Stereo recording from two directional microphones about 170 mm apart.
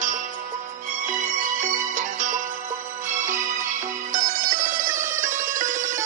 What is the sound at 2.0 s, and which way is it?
Music, 50° right (ahead or behind).